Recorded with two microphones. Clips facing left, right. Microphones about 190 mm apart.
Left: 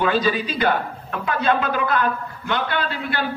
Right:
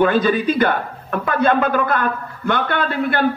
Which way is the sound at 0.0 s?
55° right (ahead or behind).